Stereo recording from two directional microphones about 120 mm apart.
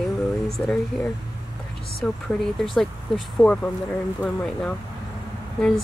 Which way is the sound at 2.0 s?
5° left (ahead or behind).